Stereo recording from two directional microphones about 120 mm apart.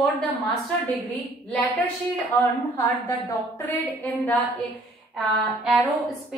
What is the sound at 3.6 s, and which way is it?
Speech, 15° left (ahead or behind).